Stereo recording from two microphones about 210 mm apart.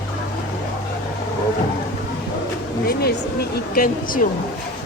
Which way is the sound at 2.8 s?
50° left (ahead or behind).